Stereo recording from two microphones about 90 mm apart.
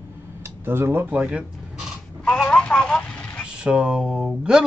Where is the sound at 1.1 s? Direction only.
10° right (ahead or behind).